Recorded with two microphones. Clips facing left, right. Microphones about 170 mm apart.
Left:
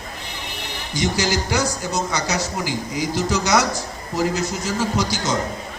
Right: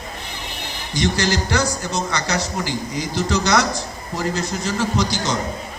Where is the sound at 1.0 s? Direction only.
20° left (ahead or behind).